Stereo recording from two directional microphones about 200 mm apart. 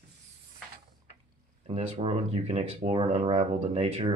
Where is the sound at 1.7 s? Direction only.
30° right (ahead or behind).